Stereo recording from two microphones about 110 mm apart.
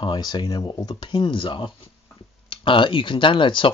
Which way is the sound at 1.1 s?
50° left (ahead or behind).